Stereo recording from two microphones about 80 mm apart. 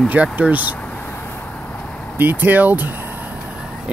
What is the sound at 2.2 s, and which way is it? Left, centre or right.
Speech, right.